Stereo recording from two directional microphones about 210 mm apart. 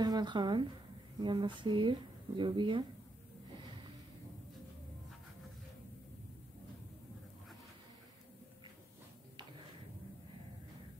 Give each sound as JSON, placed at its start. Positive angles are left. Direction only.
{"t": 0.0, "sound": "speech", "side_deg": -20}